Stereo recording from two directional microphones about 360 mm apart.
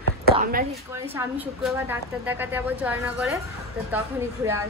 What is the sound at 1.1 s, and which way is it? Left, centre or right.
A woman's voice, centre.